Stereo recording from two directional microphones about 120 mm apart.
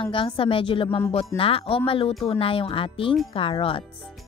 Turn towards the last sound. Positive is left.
turn(degrees=50)  # may be behind; listen again after turning